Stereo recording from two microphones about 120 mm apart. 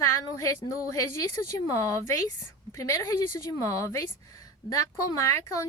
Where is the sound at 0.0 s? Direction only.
25° left (ahead or behind).